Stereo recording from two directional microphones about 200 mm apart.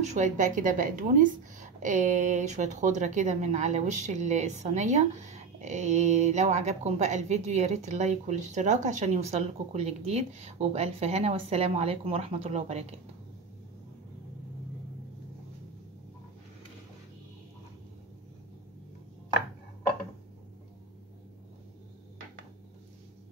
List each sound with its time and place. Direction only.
0.0 s a woman's voice: 35° right (ahead or behind)